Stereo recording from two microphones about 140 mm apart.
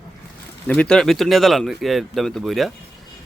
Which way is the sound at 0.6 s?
5° left (ahead or behind).